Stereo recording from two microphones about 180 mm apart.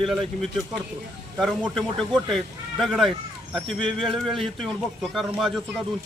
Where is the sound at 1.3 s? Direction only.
Centre (ahead or behind).